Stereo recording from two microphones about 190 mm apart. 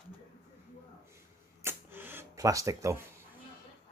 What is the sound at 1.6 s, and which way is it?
Camera, 10° right (ahead or behind).